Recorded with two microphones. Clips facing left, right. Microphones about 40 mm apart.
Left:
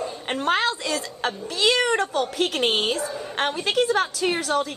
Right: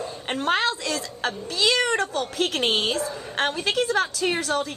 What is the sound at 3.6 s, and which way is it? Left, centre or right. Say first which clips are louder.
A woman's voice: left 3 dB; left.